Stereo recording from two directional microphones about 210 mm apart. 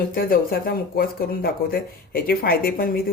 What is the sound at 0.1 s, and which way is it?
Speech, 40° left (ahead or behind).